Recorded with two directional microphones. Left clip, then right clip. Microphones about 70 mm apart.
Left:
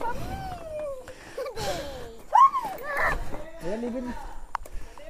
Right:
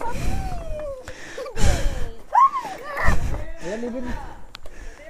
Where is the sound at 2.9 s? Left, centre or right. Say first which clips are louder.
Right 1 dB; left.